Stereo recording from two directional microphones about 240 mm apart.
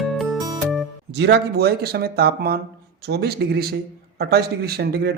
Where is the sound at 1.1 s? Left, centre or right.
Right.